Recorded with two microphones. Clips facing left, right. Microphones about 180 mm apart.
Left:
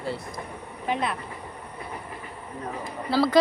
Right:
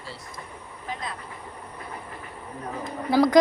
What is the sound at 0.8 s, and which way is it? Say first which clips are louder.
Speech: left 8 dB; 70° left (ahead or behind).